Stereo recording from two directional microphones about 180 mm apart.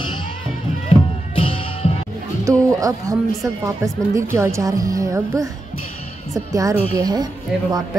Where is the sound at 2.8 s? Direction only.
20° right (ahead or behind).